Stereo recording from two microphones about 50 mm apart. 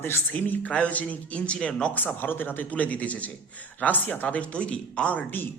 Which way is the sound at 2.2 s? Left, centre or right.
Left.